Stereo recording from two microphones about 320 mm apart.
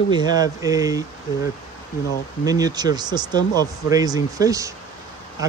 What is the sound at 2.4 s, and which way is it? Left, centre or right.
Speech, centre.